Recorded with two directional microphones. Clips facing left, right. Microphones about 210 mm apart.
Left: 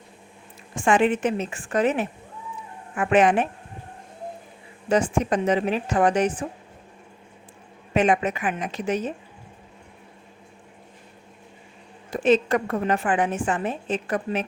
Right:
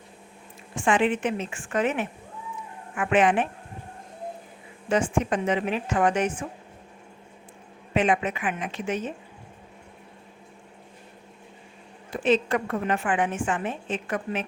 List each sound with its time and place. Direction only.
0.8 s a woman's voice: 45° left (ahead or behind)
4.9 s a woman's voice: 40° left (ahead or behind)
7.9 s a woman's voice: 40° left (ahead or behind)
12.1 s a woman's voice: 40° left (ahead or behind)